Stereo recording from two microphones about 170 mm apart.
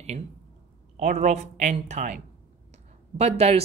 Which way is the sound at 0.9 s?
45° right (ahead or behind).